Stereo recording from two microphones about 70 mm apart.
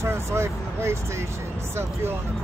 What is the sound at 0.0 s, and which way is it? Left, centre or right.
Speech, right.